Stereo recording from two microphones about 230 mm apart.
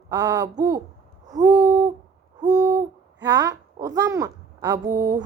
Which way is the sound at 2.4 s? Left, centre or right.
Centre.